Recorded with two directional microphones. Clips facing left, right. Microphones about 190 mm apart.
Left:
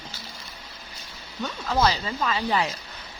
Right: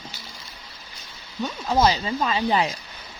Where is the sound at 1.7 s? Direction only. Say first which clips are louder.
Right 3 dB; 20° right (ahead or behind).